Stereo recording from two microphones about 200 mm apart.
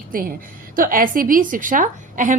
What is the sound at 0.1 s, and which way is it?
A woman's voice, 45° right (ahead or behind).